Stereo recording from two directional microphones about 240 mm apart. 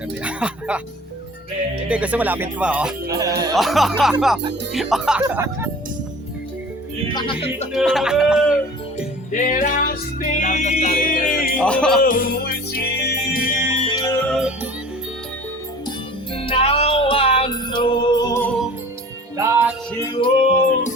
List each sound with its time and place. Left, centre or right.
0.2 s speech: centre
1.9 s speech: centre
3.5 s speech: centre
7.1 s music: centre
7.7 s speech: centre
9.3 s music: left
11.6 s speech: centre
12.0 s music: left
13.8 s music: centre
14.3 s music: centre
16.3 s music: left
19.4 s music: centre
19.9 s music: centre